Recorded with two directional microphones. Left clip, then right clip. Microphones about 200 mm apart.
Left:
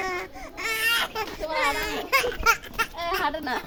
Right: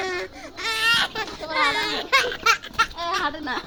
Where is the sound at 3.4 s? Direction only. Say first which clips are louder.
Right 1 dB; 45° left (ahead or behind).